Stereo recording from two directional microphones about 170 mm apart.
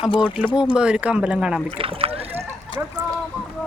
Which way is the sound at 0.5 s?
5° right (ahead or behind).